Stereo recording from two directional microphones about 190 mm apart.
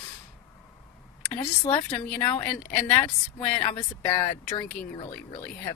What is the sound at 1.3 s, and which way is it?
Speech, 25° left (ahead or behind).